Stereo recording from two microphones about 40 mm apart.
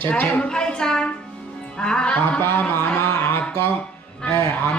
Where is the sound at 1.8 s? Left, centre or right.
Left.